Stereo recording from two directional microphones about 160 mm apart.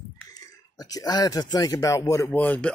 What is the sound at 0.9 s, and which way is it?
Speech, 25° left (ahead or behind).